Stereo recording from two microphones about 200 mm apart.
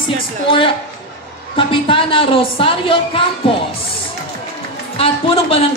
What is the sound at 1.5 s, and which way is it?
A man's voice, 25° left (ahead or behind).